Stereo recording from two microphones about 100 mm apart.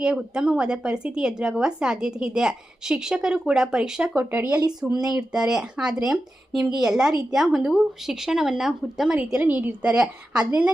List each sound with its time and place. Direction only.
0.0 s a woman's voice: 10° right (ahead or behind)
4.2 s speech: 20° right (ahead or behind)
4.9 s a woman's voice: 5° right (ahead or behind)